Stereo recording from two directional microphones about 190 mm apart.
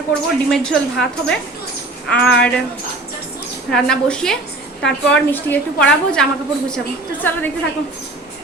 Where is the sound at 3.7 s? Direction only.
5° left (ahead or behind).